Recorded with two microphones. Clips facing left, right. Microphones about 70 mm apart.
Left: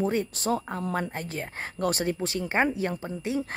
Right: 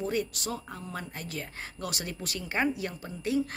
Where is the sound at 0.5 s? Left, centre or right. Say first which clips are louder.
Left 9 dB; left.